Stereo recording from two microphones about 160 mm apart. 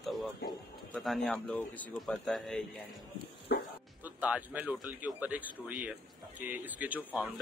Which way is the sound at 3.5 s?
90° left.